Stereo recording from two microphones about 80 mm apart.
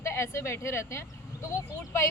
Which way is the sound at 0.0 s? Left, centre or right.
Left.